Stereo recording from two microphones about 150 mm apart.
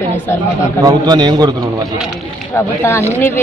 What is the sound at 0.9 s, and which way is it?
Speech, 30° right (ahead or behind).